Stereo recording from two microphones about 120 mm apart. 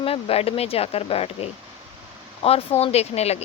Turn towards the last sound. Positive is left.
turn(degrees=60)  # may be behind; listen again after turning